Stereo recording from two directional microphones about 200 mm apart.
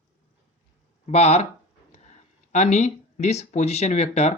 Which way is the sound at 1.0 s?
30° left (ahead or behind).